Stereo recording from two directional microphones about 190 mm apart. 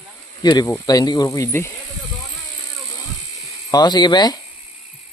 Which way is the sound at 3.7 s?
20° left (ahead or behind).